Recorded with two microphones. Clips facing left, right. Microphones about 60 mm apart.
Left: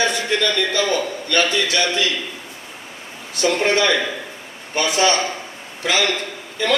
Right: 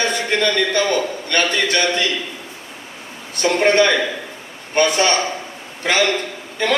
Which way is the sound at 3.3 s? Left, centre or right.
Right.